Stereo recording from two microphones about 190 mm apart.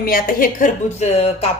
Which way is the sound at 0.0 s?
50° left (ahead or behind).